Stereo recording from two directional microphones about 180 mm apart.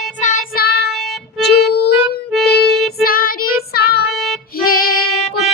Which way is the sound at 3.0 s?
55° left (ahead or behind).